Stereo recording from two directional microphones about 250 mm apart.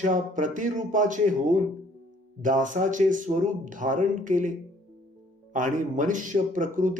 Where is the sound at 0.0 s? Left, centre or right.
Right.